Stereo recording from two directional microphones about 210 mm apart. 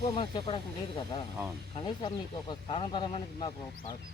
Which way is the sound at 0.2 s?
25° left (ahead or behind).